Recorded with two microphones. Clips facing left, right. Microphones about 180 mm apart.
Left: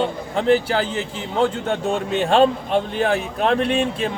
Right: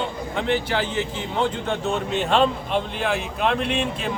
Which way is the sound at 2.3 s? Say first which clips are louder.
Left 4 dB; 40° left (ahead or behind).